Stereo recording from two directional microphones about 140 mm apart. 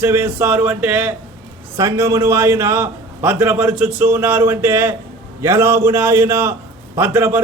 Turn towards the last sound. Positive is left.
turn(degrees=-15)  # may be behind; listen again after turning